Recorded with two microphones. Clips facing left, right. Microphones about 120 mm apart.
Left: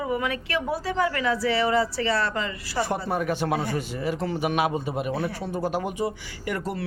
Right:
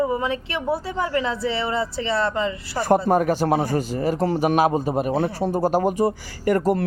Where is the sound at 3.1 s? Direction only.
45° right (ahead or behind).